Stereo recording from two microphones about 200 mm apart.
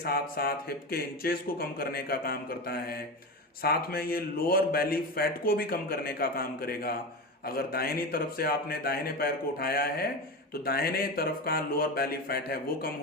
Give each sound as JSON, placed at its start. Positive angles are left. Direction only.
{"t": 0.0, "sound": "a man's voice", "side_deg": 50}